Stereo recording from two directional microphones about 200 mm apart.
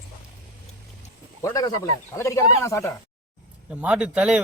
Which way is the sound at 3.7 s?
5° right (ahead or behind).